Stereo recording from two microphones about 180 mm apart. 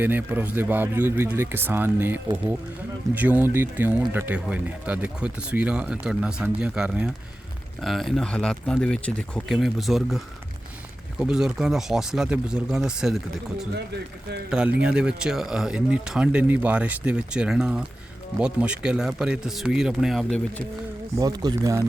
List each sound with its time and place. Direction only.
0.0 s speech: 10° right (ahead or behind)
21.2 s speech: 20° right (ahead or behind)